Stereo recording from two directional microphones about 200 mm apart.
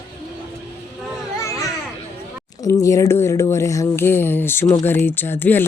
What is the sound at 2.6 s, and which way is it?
Speech, 15° left (ahead or behind).